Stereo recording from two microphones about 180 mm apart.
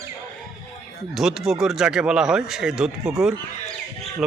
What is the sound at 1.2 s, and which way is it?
A man's voice, 5° right (ahead or behind).